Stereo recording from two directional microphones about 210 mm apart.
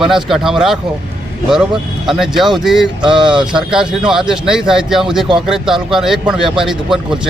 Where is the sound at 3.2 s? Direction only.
20° right (ahead or behind).